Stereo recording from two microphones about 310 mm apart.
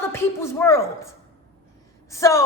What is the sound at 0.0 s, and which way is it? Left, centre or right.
A woman's voice, centre.